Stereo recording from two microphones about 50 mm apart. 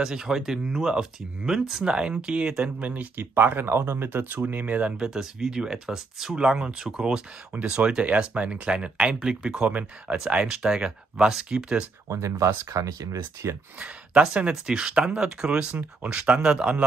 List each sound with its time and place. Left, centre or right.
0.0 s speech: centre; by 3.3 s right
3.3 s speech: right
4.9 s speech: centre
9.7 s speech: right
10.5 s speech: centre
12.1 s speech: right
13.7 s speech: right
14.5 s speech: centre